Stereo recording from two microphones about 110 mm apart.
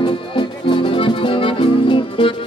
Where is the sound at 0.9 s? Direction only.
50° left (ahead or behind).